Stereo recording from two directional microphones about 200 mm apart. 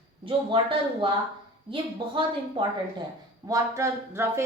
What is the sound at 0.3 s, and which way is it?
A woman's voice, 25° right (ahead or behind).